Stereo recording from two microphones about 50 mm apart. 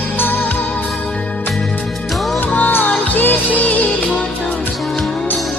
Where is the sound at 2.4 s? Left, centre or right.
Left.